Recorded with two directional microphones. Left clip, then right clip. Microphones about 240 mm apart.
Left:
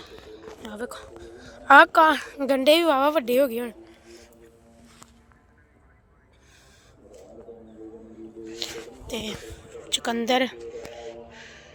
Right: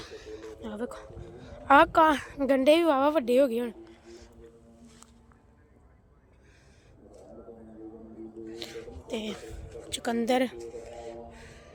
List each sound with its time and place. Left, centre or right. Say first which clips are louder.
0.0 s a woman's voice: even; centre
8.4 s zipper: left 7 dB; centre
11.3 s a sound: left 5 dB; centre